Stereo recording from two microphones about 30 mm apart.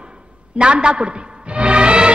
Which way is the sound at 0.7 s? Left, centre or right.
Right.